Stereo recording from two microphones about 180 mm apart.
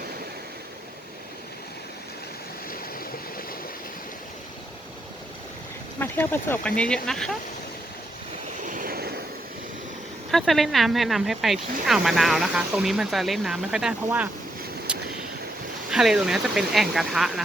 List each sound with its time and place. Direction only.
2.6 s stream: 55° left (ahead or behind)
6.0 s speech: 10° left (ahead or behind)
8.6 s waves: 50° right (ahead or behind)
10.3 s speech: centre (ahead or behind)
14.9 s vehicle: 5° right (ahead or behind)
15.9 s speech: 5° right (ahead or behind)